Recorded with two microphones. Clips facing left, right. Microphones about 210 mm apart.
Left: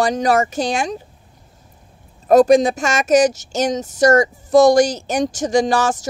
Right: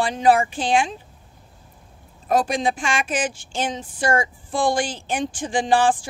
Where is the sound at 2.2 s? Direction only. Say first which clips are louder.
Left 10 dB; 40° left (ahead or behind).